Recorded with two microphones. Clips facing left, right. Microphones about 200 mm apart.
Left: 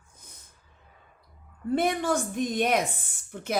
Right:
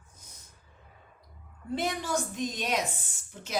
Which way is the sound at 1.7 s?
55° left (ahead or behind).